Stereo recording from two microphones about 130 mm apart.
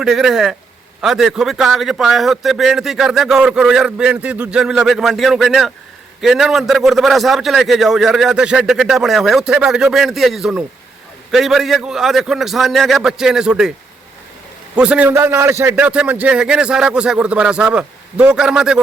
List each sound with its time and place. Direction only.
0.0 s a man's voice: centre (ahead or behind)
14.8 s speech: 10° right (ahead or behind)
15.1 s a man's voice: 20° right (ahead or behind)
15.7 s speech: 10° right (ahead or behind)